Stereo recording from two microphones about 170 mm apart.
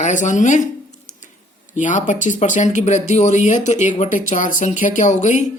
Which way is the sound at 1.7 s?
50° left (ahead or behind).